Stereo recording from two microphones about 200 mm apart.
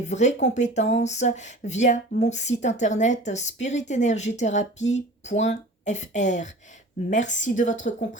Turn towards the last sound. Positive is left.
turn(degrees=40)  # may be behind; listen again after turning